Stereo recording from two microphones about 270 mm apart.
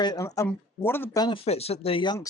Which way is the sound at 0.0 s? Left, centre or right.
Centre.